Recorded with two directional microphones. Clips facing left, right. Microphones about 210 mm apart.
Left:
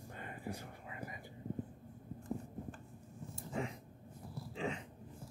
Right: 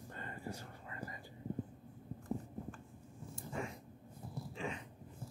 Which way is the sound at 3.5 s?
15° left (ahead or behind).